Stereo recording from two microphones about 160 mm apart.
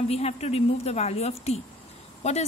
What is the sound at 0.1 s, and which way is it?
A woman's voice, 40° left (ahead or behind).